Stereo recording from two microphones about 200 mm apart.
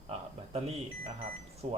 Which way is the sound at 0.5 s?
30° right (ahead or behind).